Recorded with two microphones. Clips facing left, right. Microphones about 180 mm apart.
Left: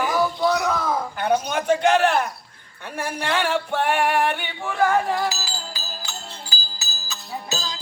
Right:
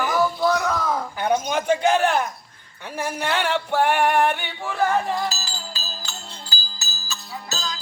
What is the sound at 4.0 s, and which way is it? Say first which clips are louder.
Speech: even; 5° left (ahead or behind).